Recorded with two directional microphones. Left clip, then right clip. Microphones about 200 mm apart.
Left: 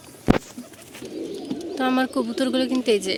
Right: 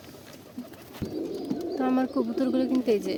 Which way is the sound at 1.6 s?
5° left (ahead or behind).